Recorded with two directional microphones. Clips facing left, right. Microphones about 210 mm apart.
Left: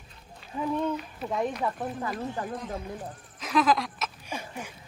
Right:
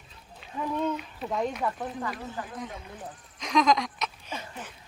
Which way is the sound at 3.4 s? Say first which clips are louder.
Even; 5° left (ahead or behind).